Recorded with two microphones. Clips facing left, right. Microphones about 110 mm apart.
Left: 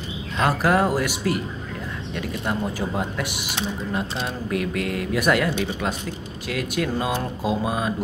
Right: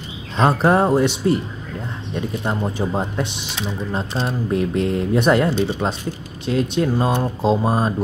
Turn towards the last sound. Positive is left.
turn(degrees=-35)  # may be behind; listen again after turning